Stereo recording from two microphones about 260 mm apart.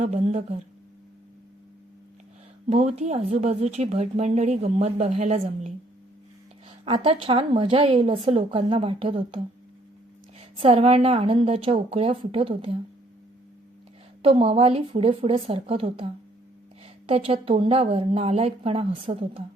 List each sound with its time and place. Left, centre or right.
0.0 s speech: right
2.6 s speech: right
10.6 s speech: right
14.2 s speech: right